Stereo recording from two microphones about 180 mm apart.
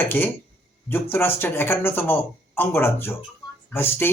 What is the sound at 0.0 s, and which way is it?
Speech, 10° left (ahead or behind).